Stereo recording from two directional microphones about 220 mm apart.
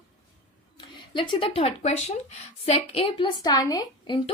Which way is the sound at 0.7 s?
25° left (ahead or behind).